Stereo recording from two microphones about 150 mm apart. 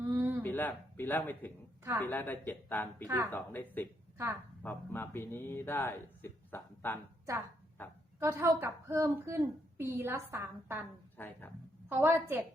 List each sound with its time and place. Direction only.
0.0 s a sound: 15° right (ahead or behind)
0.4 s a woman's voice: 10° left (ahead or behind)
8.2 s a woman's voice: 20° right (ahead or behind)
11.2 s speech: 15° left (ahead or behind)
11.9 s a woman's voice: 15° right (ahead or behind)